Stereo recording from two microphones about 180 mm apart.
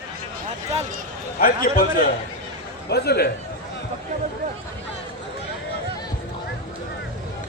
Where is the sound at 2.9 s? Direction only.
65° left (ahead or behind).